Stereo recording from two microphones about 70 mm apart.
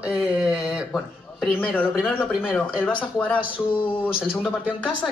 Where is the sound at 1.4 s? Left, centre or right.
Left.